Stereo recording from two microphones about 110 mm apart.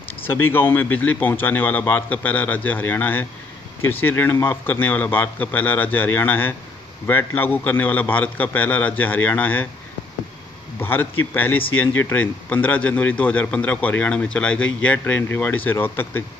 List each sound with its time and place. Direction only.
0.1 s a man's voice: 20° left (ahead or behind)
10.8 s a man's voice: 20° left (ahead or behind)